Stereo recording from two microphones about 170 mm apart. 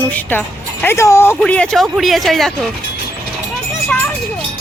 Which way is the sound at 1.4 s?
5° left (ahead or behind).